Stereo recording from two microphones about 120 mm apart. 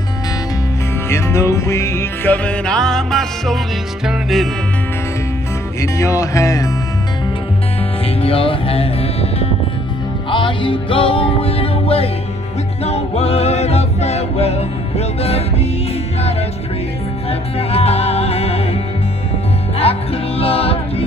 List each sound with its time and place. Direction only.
1.0 s music: 20° left (ahead or behind)
2.3 s music: 10° left (ahead or behind)
5.8 s music: 25° left (ahead or behind)
8.2 s music: 50° left (ahead or behind)
10.3 s music: 45° left (ahead or behind)
17.3 s music: 55° left (ahead or behind)
19.8 s music: 55° left (ahead or behind)